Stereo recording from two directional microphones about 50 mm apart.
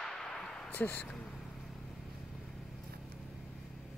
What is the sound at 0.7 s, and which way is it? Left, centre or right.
Speech, left.